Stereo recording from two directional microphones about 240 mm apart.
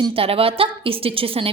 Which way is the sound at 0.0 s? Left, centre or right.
Right.